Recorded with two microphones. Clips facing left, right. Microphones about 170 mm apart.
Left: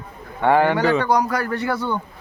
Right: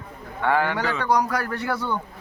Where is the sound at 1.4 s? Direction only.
5° right (ahead or behind).